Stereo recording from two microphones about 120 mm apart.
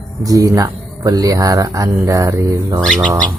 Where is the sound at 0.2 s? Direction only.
30° right (ahead or behind).